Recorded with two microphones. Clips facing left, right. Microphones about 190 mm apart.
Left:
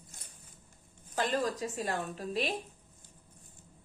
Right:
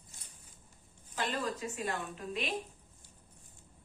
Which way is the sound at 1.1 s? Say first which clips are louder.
Left 4 dB; 40° left (ahead or behind).